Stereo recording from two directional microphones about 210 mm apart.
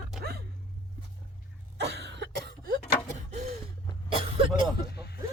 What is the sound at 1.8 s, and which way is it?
Cough, 55° right (ahead or behind).